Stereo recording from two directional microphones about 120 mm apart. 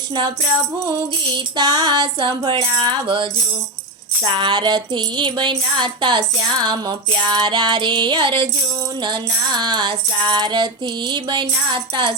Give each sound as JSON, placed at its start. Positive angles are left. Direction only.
{"t": 0.8, "sound": "music", "side_deg": -35}